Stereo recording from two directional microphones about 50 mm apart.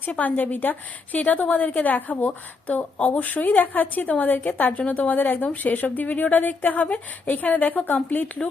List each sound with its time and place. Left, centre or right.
0.0 s a woman's voice: left